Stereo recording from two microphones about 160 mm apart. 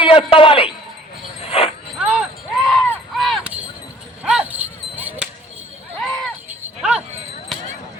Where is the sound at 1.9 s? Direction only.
5° right (ahead or behind).